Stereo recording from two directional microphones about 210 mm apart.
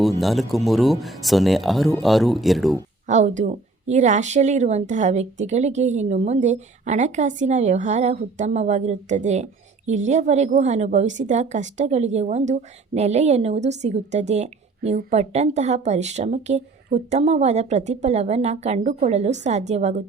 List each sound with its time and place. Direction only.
0.2 s speech: centre (ahead or behind)
3.1 s a woman's voice: 35° right (ahead or behind)